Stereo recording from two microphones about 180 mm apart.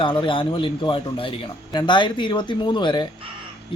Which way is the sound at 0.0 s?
30° left (ahead or behind).